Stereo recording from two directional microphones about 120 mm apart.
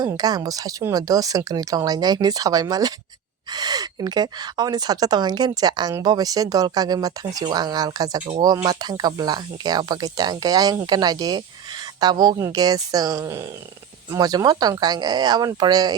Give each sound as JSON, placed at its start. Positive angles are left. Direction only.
{"t": 0.0, "sound": "speech", "side_deg": -35}